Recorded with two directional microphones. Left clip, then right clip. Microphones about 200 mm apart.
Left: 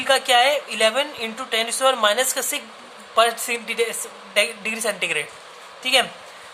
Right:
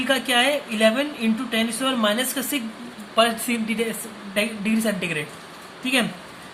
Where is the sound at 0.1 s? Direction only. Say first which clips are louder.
Left 4 dB; 45° left (ahead or behind).